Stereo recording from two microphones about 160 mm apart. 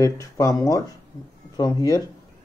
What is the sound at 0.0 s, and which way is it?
Speech, 20° left (ahead or behind).